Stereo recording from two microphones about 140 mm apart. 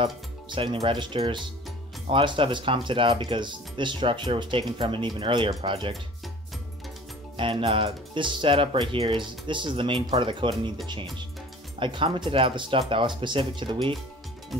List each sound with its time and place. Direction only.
0.0 s speech: 35° right (ahead or behind)
7.3 s speech: 40° right (ahead or behind)